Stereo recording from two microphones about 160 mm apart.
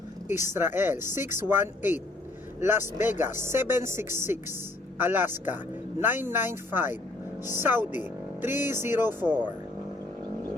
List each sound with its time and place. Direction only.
0.4 s speech: 15° right (ahead or behind)